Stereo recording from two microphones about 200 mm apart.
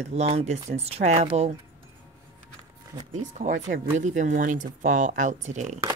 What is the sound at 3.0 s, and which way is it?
Speech, 35° right (ahead or behind).